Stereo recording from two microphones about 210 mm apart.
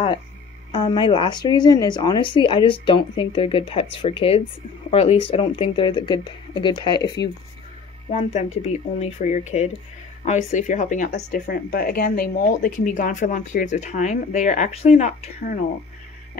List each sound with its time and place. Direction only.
0.7 s speech: 20° left (ahead or behind)
8.1 s speech: 35° left (ahead or behind)
11.4 s speech: 45° left (ahead or behind)